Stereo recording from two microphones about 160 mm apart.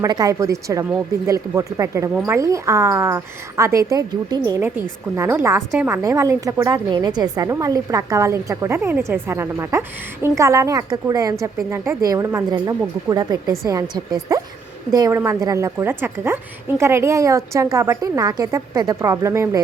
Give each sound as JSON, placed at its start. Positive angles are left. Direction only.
{"t": 0.0, "sound": "a woman's voice", "side_deg": -20}